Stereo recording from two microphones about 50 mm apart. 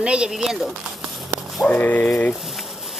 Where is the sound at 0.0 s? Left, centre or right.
Right.